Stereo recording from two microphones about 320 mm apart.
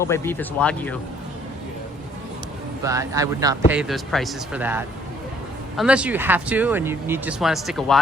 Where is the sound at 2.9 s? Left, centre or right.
Centre.